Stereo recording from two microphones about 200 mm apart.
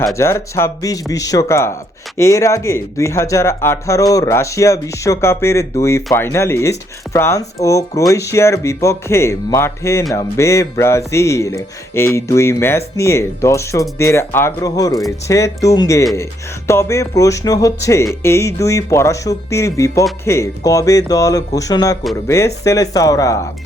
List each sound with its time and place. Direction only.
0.2 s speech: 15° left (ahead or behind)